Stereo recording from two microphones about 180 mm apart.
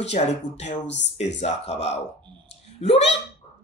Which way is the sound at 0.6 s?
80° left.